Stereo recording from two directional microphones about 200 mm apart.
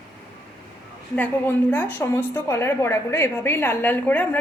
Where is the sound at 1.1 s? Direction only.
10° left (ahead or behind).